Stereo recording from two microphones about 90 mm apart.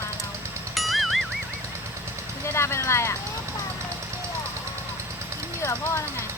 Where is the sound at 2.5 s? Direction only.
30° left (ahead or behind).